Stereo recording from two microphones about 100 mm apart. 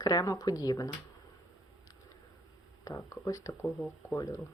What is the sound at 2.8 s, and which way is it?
Speech, 30° left (ahead or behind).